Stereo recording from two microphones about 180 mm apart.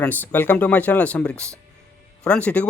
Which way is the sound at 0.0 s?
10° left (ahead or behind).